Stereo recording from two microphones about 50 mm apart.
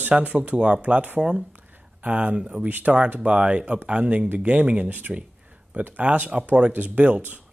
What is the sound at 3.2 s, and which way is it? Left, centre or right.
Speech, right.